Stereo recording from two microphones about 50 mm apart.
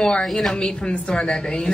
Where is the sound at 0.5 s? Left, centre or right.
Centre.